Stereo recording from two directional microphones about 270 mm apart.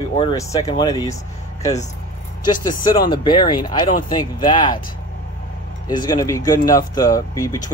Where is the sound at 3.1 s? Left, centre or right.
Centre.